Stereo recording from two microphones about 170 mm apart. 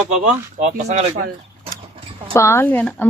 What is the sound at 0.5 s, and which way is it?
Speech, 45° right (ahead or behind).